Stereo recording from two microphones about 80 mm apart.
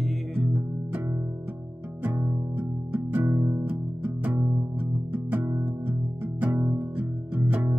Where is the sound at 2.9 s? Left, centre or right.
Right.